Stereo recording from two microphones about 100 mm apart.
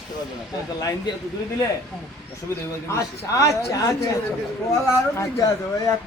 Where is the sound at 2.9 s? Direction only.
30° left (ahead or behind).